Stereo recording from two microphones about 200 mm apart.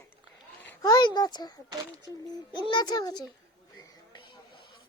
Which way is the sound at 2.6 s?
20° left (ahead or behind).